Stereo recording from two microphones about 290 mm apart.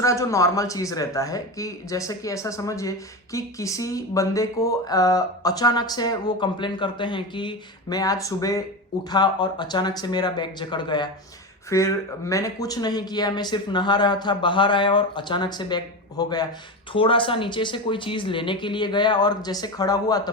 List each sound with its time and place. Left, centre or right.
0.0 s a man's voice: centre